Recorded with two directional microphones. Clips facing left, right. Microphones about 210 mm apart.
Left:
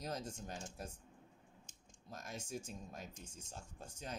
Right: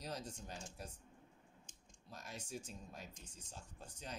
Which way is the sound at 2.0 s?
45° left (ahead or behind).